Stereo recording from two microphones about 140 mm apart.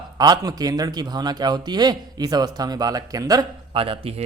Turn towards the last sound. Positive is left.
turn(degrees=-45)  # may be behind; listen again after turning